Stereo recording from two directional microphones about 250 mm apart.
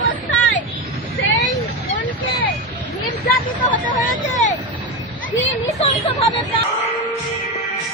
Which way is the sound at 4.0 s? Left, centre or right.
Left.